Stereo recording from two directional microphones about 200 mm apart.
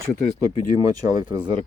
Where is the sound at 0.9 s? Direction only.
20° right (ahead or behind).